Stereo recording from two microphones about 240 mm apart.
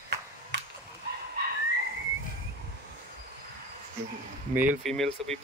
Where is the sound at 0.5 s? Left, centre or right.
Right.